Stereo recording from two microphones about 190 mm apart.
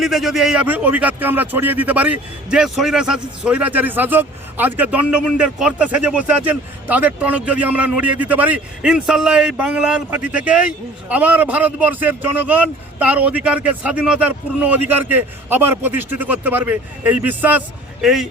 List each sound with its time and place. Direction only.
0.0 s a man's voice: centre (ahead or behind)